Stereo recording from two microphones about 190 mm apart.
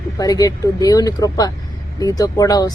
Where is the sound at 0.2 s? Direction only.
20° left (ahead or behind).